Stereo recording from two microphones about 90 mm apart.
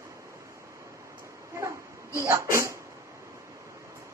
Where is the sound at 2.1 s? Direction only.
35° right (ahead or behind).